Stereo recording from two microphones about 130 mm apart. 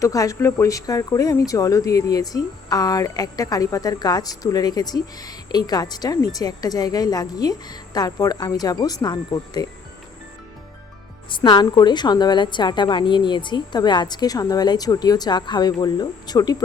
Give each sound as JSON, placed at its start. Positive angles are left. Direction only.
{"t": 0.0, "sound": "speech", "side_deg": 25}
{"t": 11.3, "sound": "a woman's voice", "side_deg": 40}